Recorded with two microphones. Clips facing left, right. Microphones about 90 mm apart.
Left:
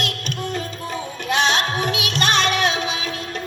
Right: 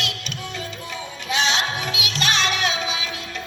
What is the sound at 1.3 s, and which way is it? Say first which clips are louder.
Music: left 3 dB; 50° left (ahead or behind).